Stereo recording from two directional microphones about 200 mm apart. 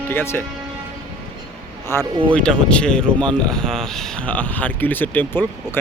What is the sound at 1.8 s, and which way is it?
Speech, 10° left (ahead or behind).